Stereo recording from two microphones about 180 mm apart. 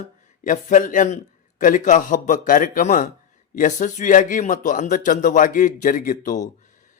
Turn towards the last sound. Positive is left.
turn(degrees=45)  # may be behind; listen again after turning